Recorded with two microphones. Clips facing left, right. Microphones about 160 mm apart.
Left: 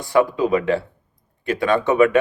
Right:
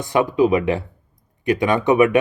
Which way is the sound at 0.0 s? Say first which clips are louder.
Right 1 dB; 20° right (ahead or behind).